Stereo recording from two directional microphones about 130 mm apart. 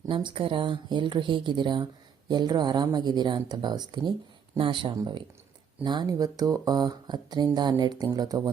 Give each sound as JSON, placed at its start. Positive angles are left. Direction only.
{"t": 0.1, "sound": "speech", "side_deg": -40}